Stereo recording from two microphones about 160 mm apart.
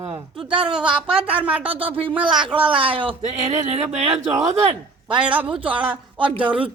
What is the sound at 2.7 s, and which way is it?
Speech, 35° right (ahead or behind).